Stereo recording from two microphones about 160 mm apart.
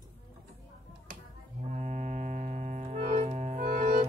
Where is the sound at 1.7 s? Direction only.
50° right (ahead or behind).